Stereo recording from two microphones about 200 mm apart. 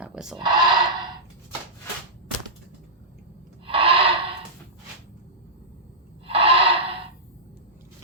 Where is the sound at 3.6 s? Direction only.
25° right (ahead or behind).